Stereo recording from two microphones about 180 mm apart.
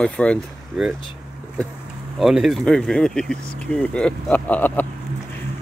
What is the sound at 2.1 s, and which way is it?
Speech, centre (ahead or behind).